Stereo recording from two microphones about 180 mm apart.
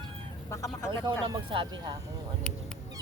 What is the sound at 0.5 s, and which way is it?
Speech, 15° left (ahead or behind).